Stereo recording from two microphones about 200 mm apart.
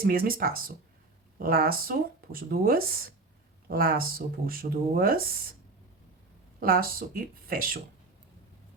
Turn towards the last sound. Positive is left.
turn(degrees=-45)  # may be behind; listen again after turning